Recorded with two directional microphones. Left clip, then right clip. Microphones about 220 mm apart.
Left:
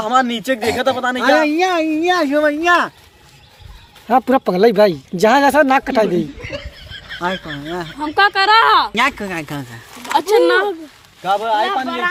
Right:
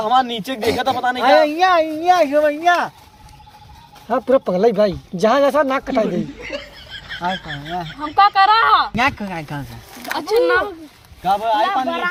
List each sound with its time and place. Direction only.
0.0 s a woman's voice: 20° left (ahead or behind); by 2.9 s 35° left (ahead or behind)
4.1 s speech: 35° left (ahead or behind)
6.1 s speech: centre (ahead or behind)
8.1 s speech: 35° left (ahead or behind); by 9.6 s 55° left (ahead or behind)
10.2 s speech: 40° left (ahead or behind)
11.2 s a woman's voice: 25° left (ahead or behind)